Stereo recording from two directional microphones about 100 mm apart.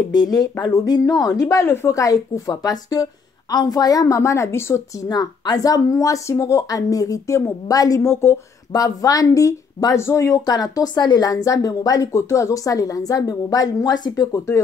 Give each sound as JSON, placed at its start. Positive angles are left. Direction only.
{"t": 0.1, "sound": "speech", "side_deg": 40}
{"t": 5.1, "sound": "speech", "side_deg": 40}
{"t": 14.3, "sound": "speech", "side_deg": 30}